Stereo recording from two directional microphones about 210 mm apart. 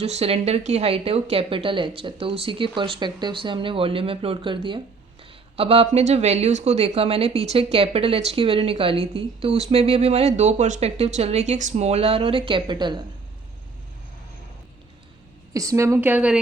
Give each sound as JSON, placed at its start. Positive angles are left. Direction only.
{"t": 0.0, "sound": "speech", "side_deg": -30}
{"t": 15.5, "sound": "a woman's voice", "side_deg": -15}